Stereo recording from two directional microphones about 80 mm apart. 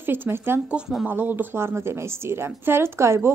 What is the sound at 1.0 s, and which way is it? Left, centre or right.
A woman's voice, right.